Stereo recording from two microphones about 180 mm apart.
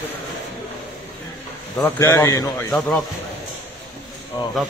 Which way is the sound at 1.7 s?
15° left (ahead or behind).